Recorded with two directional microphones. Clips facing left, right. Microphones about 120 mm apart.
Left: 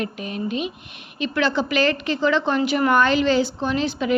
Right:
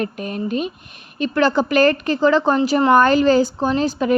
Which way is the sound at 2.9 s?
45° right (ahead or behind).